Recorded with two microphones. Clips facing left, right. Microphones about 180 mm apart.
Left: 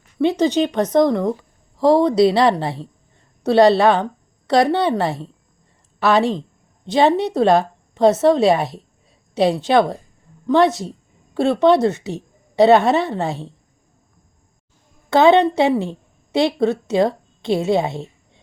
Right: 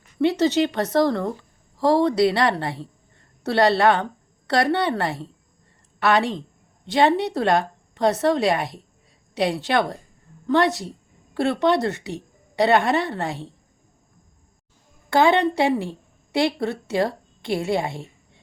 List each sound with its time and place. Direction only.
0.2 s a woman's voice: 15° left (ahead or behind)
11.6 s a woman's voice: 20° left (ahead or behind)
15.1 s a woman's voice: 20° left (ahead or behind)